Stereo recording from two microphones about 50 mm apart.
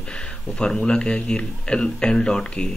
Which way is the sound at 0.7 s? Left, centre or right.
Centre.